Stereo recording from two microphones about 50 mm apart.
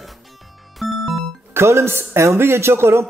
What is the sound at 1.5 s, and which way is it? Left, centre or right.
A man's voice, right.